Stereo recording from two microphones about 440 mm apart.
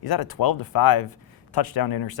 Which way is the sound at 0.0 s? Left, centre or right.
Left.